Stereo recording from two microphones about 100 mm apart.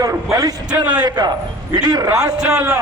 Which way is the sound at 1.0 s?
45° right (ahead or behind).